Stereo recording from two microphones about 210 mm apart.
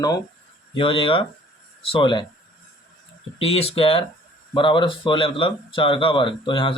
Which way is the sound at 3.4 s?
30° left (ahead or behind).